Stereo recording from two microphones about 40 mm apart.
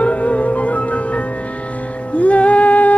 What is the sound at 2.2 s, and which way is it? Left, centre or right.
Music, left.